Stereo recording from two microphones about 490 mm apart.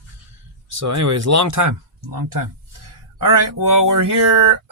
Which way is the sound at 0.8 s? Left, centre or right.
Right.